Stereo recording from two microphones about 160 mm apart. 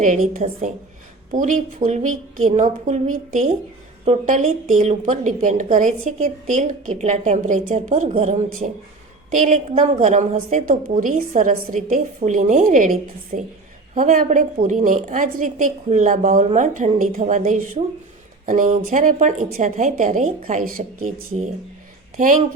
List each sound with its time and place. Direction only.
0.0 s a woman's voice: 55° right (ahead or behind)
22.2 s a woman's voice: 55° right (ahead or behind)